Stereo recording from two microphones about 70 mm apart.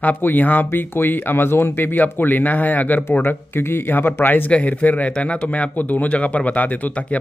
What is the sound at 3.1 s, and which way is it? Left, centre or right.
Speech, left.